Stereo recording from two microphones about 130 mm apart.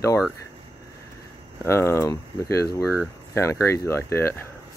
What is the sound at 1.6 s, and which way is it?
Speech, 20° left (ahead or behind).